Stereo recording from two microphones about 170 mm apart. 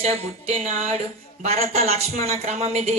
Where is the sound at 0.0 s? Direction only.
40° right (ahead or behind).